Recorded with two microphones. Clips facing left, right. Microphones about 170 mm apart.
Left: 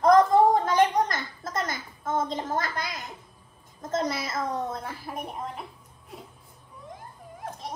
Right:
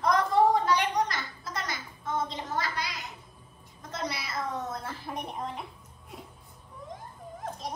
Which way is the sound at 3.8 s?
45° left (ahead or behind).